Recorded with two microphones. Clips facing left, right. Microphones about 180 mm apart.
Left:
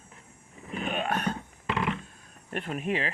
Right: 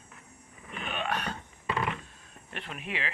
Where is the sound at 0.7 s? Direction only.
40° left (ahead or behind).